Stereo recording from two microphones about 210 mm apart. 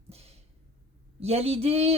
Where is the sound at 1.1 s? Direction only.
30° right (ahead or behind).